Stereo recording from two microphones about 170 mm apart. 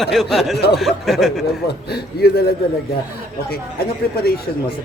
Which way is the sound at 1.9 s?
65° left (ahead or behind).